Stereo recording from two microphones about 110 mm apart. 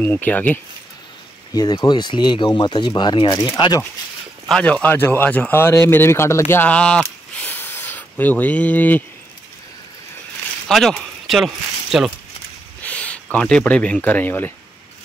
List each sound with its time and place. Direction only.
0.0 s speech: 15° left (ahead or behind)
1.5 s speech: 35° left (ahead or behind)
4.5 s speech: 10° left (ahead or behind)
7.3 s a sound: 20° left (ahead or behind)
10.7 s speech: centre (ahead or behind)
12.8 s speech: 10° left (ahead or behind)